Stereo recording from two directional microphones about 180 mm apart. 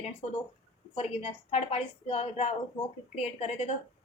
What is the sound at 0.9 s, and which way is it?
A woman's voice, 30° left (ahead or behind).